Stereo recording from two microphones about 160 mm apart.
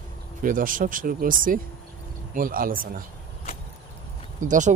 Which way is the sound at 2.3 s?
60° right (ahead or behind).